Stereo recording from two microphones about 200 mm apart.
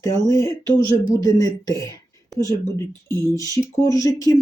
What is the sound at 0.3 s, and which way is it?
Speech, 15° left (ahead or behind).